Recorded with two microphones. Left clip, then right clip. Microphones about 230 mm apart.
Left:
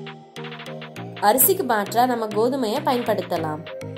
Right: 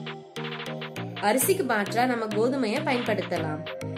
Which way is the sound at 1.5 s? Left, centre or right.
Centre.